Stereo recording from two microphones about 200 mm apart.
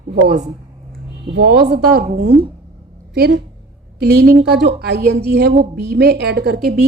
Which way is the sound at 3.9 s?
50° right (ahead or behind).